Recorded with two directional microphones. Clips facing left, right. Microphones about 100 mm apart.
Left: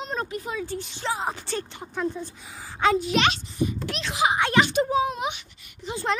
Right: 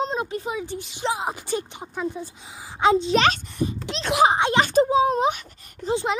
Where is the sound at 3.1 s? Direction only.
40° right (ahead or behind).